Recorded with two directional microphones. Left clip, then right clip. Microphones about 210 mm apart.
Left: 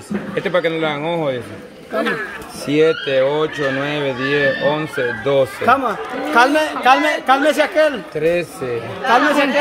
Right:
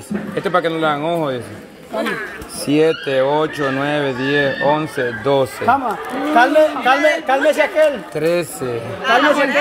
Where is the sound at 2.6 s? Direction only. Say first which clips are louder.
Even; 15° right (ahead or behind).